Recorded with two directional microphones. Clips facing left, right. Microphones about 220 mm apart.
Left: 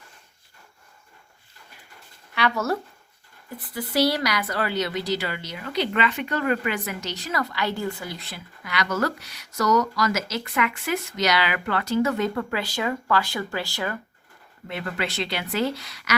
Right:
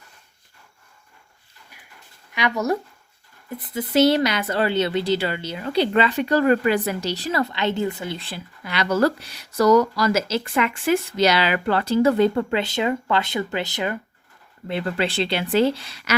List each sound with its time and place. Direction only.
2.3 s speech: 15° right (ahead or behind)
14.7 s speech: 30° right (ahead or behind)